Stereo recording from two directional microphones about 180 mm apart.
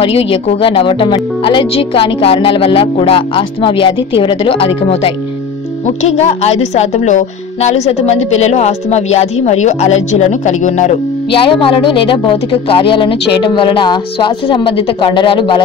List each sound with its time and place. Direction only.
0.0 s a woman's voice: 30° left (ahead or behind)
11.3 s speech: 30° left (ahead or behind)